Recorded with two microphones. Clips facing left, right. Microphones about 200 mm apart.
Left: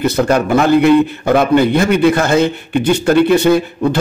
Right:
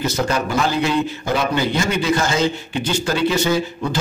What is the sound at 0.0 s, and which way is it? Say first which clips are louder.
A man's voice: left 7 dB; 60° left (ahead or behind).